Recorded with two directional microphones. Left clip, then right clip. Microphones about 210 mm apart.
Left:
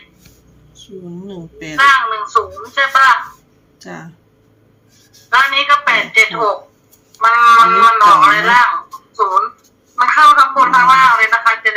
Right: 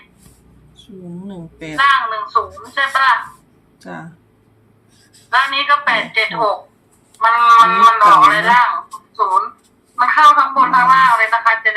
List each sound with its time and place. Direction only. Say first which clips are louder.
1.3 s speech: left 1 dB; 5° right (ahead or behind)
1.7 s speech: left 3 dB; 20° left (ahead or behind)
5.3 s speech: left 3 dB; 15° left (ahead or behind)